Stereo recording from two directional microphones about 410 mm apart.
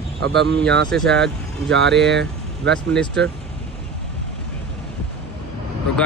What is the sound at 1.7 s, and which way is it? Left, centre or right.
Speech, right.